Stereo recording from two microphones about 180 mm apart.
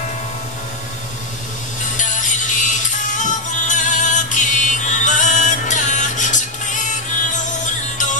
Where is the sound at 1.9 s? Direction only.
45° left (ahead or behind).